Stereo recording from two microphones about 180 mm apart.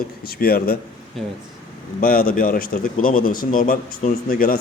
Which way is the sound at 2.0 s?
50° left (ahead or behind).